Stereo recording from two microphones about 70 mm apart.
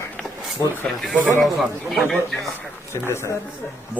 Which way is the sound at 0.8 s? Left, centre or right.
Centre.